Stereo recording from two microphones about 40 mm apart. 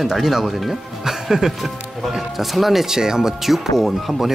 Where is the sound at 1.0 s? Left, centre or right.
Centre.